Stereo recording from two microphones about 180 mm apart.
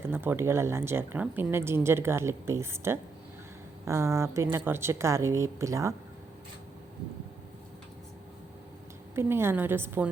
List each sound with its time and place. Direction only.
0.1 s speech: 10° right (ahead or behind)
9.1 s speech: 15° right (ahead or behind)